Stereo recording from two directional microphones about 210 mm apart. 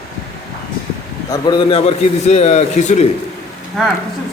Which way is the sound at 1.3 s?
20° left (ahead or behind).